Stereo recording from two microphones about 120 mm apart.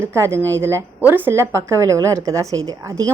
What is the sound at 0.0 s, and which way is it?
A woman's voice, 25° right (ahead or behind).